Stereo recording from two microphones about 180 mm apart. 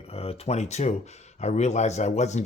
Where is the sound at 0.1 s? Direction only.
35° left (ahead or behind).